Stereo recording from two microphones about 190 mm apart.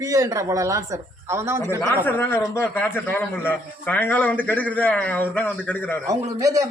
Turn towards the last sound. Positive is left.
turn(degrees=-15)  # may be behind; listen again after turning